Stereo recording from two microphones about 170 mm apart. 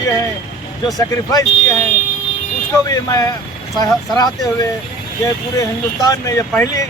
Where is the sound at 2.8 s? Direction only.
20° left (ahead or behind).